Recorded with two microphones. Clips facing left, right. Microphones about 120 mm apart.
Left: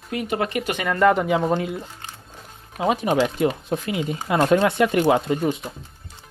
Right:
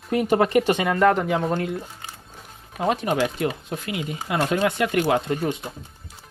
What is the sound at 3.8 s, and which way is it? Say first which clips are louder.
Speech: even; 30° left (ahead or behind).